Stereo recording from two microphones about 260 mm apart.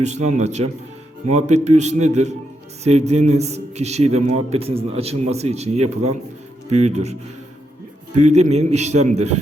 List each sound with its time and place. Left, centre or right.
0.0 s a man's voice: right
8.2 s a man's voice: right